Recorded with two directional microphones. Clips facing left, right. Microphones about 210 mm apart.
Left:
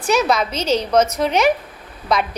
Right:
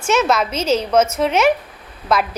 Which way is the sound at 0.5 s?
30° left (ahead or behind).